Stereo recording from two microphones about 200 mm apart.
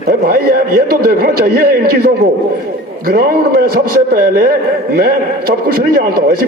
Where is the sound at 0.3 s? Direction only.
45° right (ahead or behind).